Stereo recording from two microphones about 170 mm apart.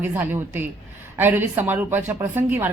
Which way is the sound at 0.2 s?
15° right (ahead or behind).